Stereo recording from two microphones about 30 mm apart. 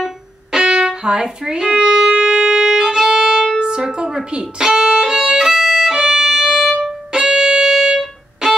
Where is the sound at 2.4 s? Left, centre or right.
Right.